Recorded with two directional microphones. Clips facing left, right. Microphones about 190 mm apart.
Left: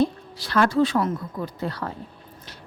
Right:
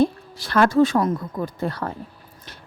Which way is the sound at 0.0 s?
50° right (ahead or behind).